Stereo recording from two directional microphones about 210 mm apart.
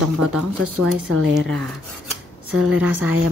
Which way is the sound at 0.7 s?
90° right.